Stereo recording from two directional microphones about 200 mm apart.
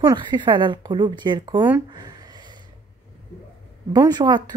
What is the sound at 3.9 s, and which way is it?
Speech, 20° right (ahead or behind).